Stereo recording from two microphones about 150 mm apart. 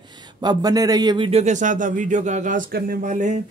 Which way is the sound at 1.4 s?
55° right (ahead or behind).